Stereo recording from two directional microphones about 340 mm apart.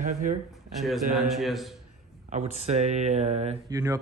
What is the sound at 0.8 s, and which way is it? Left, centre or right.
Speech, centre.